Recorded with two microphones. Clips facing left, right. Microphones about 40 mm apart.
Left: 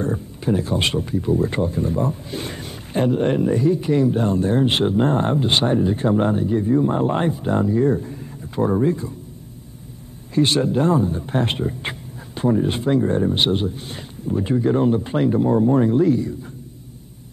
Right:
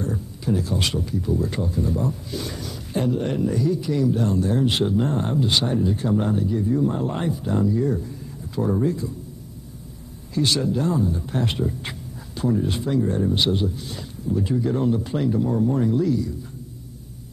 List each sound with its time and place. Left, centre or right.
0.0 s speech: left
10.3 s speech: left